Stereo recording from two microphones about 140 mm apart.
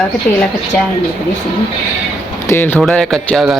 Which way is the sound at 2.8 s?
Centre (ahead or behind).